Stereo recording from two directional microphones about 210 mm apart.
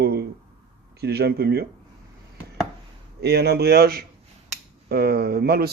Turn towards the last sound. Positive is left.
turn(degrees=-45)  # may be behind; listen again after turning